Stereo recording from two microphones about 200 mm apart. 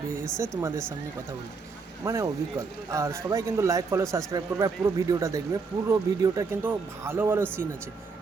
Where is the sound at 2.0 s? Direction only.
15° right (ahead or behind).